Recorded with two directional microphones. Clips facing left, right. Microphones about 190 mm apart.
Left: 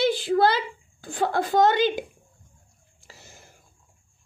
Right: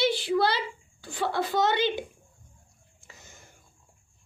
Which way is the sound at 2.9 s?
35° left (ahead or behind).